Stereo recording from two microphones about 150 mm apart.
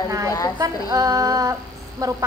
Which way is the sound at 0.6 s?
25° right (ahead or behind).